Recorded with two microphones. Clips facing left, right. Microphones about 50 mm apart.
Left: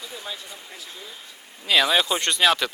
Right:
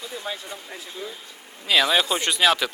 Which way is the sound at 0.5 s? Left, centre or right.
Right.